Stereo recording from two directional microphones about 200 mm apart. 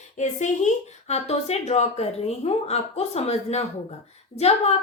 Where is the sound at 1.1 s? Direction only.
35° left (ahead or behind).